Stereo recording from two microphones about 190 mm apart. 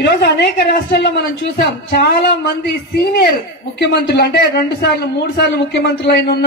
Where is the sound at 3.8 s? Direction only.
60° left (ahead or behind).